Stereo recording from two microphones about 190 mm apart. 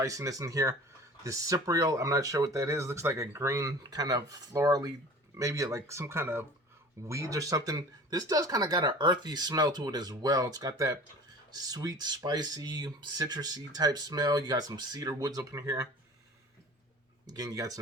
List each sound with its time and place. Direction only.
0.0 s speech: 15° right (ahead or behind)
17.2 s speech: 20° right (ahead or behind)